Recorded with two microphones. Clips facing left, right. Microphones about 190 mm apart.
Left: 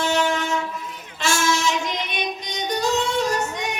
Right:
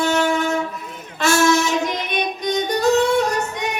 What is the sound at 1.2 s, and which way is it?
Female singing, 60° right (ahead or behind).